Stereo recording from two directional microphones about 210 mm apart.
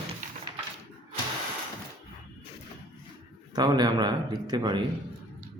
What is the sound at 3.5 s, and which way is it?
A man's voice, 20° right (ahead or behind).